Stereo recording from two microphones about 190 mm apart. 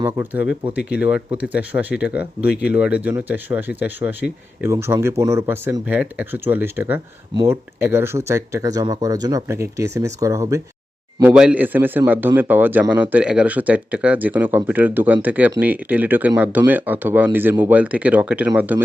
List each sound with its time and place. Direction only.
0.0 s speech: 10° right (ahead or behind)
11.2 s speech: 5° right (ahead or behind)